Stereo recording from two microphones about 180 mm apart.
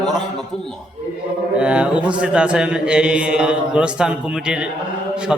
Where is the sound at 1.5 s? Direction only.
5° right (ahead or behind).